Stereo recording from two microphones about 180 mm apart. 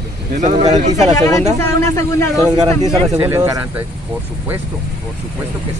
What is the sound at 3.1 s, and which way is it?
Speech, 15° right (ahead or behind).